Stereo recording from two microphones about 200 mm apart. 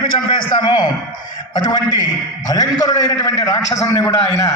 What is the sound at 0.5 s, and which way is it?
A man's voice, 20° left (ahead or behind).